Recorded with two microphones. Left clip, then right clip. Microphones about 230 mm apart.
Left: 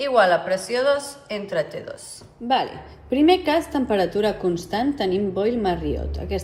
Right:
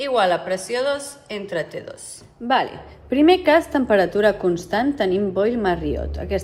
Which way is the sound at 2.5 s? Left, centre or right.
Right.